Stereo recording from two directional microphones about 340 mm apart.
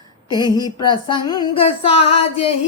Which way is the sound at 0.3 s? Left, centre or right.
Centre.